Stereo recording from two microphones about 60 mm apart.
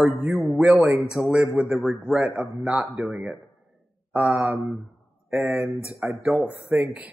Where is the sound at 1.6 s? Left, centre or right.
Centre.